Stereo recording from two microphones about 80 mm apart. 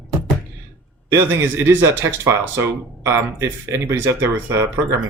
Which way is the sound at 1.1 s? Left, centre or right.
Right.